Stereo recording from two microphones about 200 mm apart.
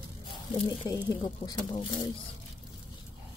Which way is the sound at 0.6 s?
20° left (ahead or behind).